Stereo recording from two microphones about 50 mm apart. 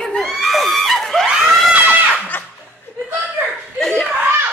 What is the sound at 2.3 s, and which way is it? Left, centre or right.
Laughter, left.